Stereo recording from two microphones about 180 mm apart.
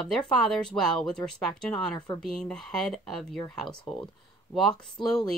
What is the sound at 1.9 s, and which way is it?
Speech, 25° left (ahead or behind).